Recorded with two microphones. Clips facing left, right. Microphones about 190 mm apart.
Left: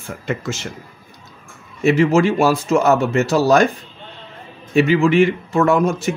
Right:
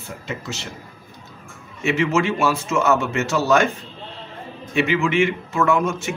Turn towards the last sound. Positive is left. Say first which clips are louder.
# left 4 dB
turn(degrees=35)  # may be behind; listen again after turning